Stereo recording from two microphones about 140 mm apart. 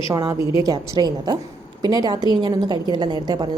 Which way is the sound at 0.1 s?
30° right (ahead or behind).